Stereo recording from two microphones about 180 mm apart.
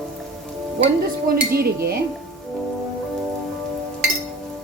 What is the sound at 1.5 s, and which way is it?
Speech, 60° right (ahead or behind).